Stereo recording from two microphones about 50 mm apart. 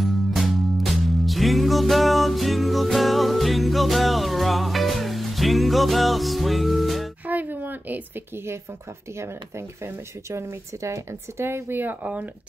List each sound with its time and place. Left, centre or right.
0.0 s music: centre
7.2 s music: right
9.8 s speech: right
11.4 s speech: right